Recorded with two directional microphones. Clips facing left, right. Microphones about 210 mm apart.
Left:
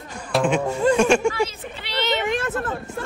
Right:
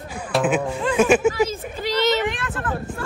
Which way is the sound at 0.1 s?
5° right (ahead or behind).